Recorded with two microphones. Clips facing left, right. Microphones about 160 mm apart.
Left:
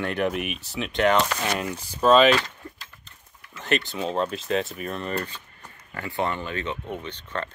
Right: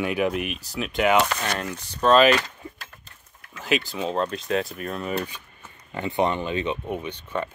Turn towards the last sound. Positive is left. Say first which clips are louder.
# right 3 dB
turn(degrees=-10)  # may be behind; listen again after turning